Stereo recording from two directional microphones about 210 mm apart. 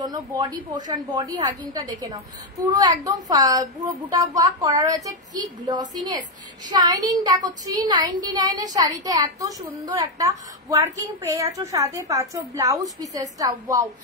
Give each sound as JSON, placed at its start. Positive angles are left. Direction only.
{"t": 0.0, "sound": "a woman's voice", "side_deg": -20}